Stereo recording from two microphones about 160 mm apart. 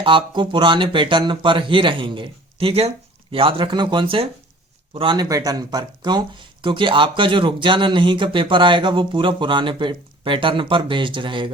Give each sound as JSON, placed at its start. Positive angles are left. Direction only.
{"t": 0.0, "sound": "speech", "side_deg": -30}